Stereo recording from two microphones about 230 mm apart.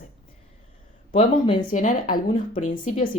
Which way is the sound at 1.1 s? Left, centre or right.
Left.